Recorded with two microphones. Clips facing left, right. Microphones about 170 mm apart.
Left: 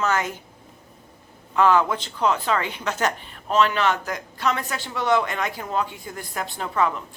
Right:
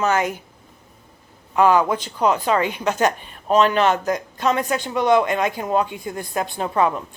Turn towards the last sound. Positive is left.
turn(degrees=-20)  # may be behind; listen again after turning